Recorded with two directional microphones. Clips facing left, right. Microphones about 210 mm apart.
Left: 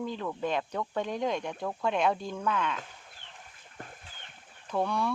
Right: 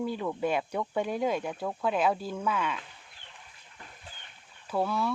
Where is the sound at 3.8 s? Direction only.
50° left (ahead or behind).